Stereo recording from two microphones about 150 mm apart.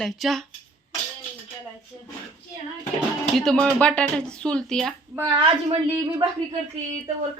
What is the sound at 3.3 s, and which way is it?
A woman's voice, 5° left (ahead or behind).